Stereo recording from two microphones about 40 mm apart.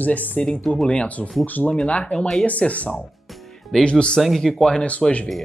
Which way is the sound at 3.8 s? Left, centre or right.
Left.